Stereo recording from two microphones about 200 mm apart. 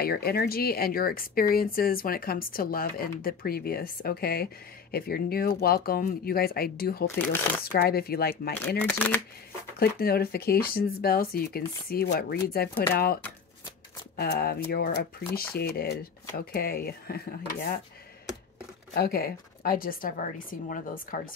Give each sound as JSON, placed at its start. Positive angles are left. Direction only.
{"t": 0.0, "sound": "speech", "side_deg": 50}
{"t": 8.7, "sound": "speech", "side_deg": 10}
{"t": 9.8, "sound": "speech", "side_deg": 50}
{"t": 18.9, "sound": "speech", "side_deg": 50}